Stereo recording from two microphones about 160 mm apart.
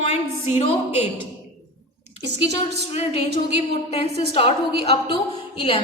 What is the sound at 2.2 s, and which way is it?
Speech, 90° right.